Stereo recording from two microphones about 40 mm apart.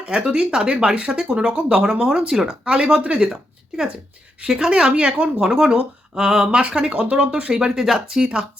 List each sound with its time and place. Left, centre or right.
0.3 s speech: right
4.4 s speech: centre
7.8 s speech: centre